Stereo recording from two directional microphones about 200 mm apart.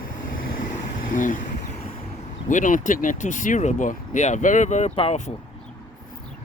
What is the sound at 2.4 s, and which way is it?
Speech, 40° left (ahead or behind).